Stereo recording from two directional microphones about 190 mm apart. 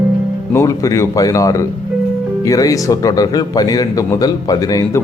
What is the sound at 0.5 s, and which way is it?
A man's voice, 15° left (ahead or behind).